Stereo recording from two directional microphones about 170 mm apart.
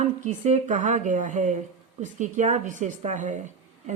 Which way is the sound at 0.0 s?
45° right (ahead or behind).